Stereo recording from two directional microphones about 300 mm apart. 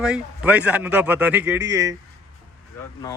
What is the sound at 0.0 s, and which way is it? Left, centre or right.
Speech, centre.